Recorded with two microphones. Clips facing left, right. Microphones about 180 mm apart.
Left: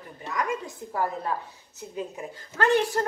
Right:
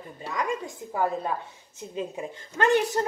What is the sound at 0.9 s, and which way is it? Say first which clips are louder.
A woman's voice: right 2 dB; 20° right (ahead or behind).